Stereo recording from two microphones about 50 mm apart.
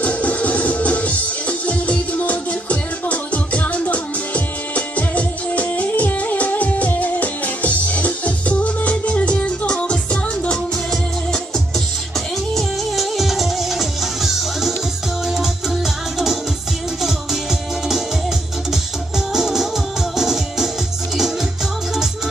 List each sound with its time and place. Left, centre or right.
0.0 s music: left
10.9 s music: centre